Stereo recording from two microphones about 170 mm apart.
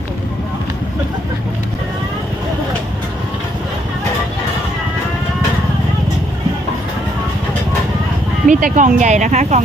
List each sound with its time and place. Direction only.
8.4 s speech: 50° right (ahead or behind)